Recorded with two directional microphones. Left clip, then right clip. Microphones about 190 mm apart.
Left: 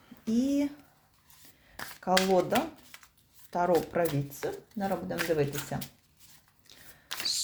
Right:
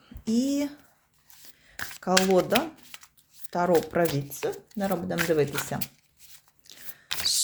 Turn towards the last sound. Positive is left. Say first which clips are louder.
# right 5 dB
turn(degrees=-25)  # may be behind; listen again after turning